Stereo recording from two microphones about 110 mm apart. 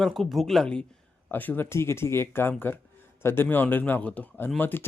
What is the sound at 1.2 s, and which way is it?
Speech, 15° left (ahead or behind).